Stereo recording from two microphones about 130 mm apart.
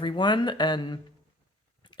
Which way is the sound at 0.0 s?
35° left (ahead or behind).